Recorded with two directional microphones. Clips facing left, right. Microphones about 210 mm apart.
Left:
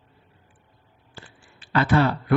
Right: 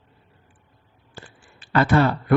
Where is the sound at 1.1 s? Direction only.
45° right (ahead or behind).